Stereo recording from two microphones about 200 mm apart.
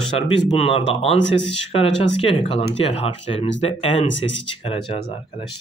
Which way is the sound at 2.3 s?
25° left (ahead or behind).